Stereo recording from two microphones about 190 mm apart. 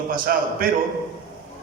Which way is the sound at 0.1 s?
45° right (ahead or behind).